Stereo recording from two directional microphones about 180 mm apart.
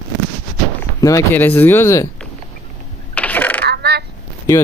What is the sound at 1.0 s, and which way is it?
Speech, 15° left (ahead or behind).